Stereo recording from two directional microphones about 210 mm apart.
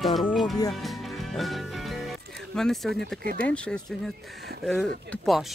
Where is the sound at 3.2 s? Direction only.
45° right (ahead or behind).